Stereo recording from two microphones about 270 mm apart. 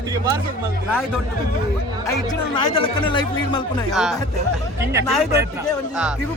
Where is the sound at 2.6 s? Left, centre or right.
Centre.